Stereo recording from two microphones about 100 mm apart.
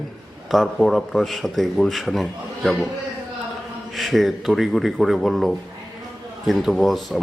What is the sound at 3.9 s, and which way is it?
Speech, centre (ahead or behind).